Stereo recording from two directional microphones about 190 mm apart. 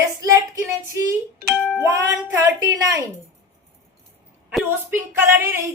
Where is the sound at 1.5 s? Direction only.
10° left (ahead or behind).